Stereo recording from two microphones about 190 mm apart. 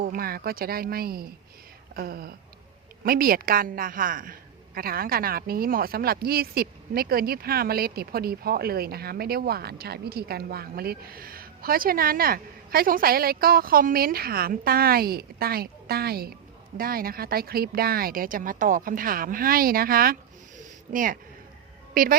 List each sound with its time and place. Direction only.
0.0 s a woman's voice: 50° right (ahead or behind)